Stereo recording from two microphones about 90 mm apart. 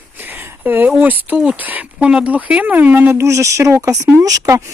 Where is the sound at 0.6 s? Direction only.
20° right (ahead or behind).